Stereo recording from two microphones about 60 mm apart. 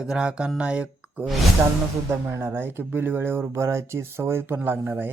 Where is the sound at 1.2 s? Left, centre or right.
Centre.